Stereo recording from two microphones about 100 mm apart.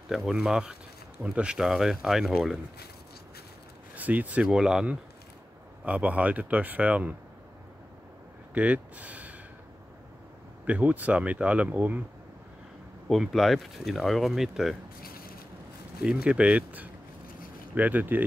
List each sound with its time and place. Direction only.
0.1 s a man's voice: 5° right (ahead or behind)
3.9 s a man's voice: 15° right (ahead or behind)
8.5 s speech: 15° right (ahead or behind)
10.7 s a man's voice: 15° right (ahead or behind)
13.1 s speech: centre (ahead or behind)
16.0 s a man's voice: 10° right (ahead or behind)